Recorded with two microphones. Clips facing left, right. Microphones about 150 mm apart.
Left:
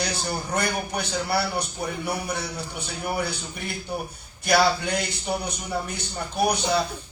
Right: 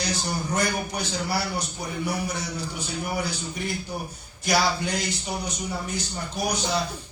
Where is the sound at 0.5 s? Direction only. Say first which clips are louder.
Even; 60° left (ahead or behind).